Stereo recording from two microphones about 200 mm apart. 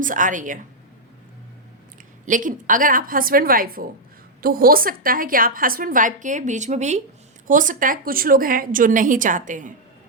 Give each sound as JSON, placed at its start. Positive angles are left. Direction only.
{"t": 0.0, "sound": "a woman's voice", "side_deg": -40}
{"t": 2.2, "sound": "a woman's voice", "side_deg": -40}